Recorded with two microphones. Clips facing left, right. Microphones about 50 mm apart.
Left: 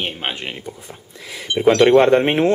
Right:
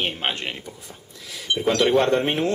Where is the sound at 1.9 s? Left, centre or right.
Centre.